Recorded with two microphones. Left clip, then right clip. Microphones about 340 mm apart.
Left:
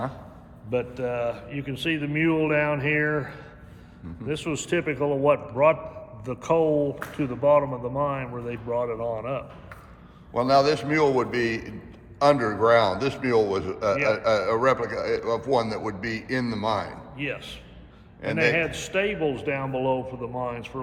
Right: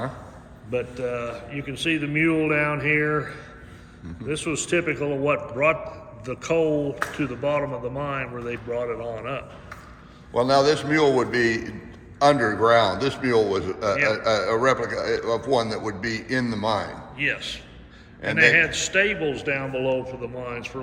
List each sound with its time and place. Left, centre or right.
0.7 s a man's voice: left
10.3 s a man's voice: centre
17.2 s a man's voice: centre
18.2 s a man's voice: centre
18.5 s a man's voice: centre